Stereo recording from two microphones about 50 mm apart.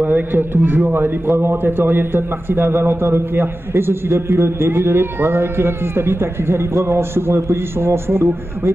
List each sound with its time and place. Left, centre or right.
0.0 s a man's voice: right
0.9 s a man's voice: right